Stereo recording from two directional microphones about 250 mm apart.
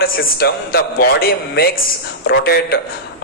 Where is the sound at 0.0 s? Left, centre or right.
Left.